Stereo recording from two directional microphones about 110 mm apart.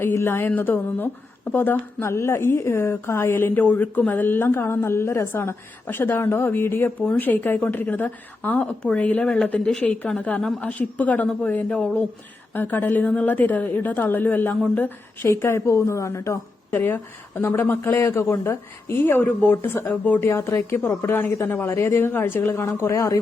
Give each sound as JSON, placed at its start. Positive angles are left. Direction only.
{"t": 0.0, "sound": "a woman's voice", "side_deg": 20}